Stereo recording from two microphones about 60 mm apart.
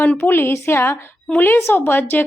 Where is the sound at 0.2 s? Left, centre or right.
Left.